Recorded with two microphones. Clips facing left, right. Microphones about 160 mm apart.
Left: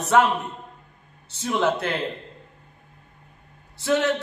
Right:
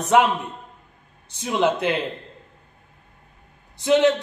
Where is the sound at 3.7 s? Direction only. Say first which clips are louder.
Right 5 dB; 20° right (ahead or behind).